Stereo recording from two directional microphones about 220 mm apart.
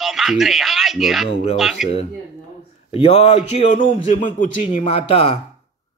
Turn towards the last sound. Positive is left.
turn(degrees=25)  # may be behind; listen again after turning